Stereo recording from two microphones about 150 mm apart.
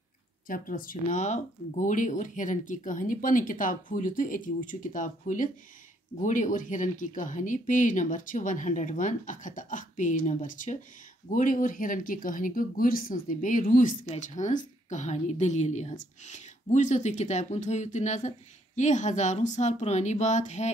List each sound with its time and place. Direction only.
0.5 s speech: 65° left (ahead or behind)
14.0 s a woman's voice: 50° left (ahead or behind)